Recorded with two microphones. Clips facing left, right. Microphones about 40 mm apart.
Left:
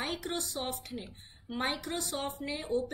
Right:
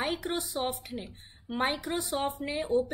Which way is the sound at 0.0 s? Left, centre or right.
Centre.